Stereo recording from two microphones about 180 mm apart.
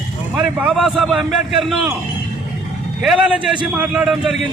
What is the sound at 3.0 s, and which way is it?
A man's voice, 5° right (ahead or behind).